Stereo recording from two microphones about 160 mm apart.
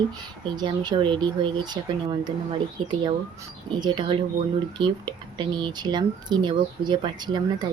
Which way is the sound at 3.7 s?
30° right (ahead or behind).